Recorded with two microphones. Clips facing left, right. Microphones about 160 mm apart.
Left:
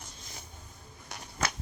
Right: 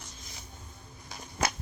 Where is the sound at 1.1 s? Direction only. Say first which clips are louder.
Even; 70° left (ahead or behind).